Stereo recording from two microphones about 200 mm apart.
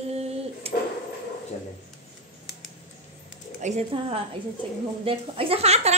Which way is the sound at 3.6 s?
30° right (ahead or behind).